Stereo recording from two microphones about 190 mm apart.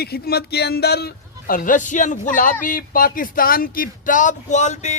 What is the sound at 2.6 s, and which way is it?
Speech, 45° left (ahead or behind).